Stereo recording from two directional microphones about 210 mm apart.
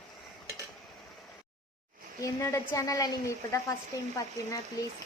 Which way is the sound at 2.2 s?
15° left (ahead or behind).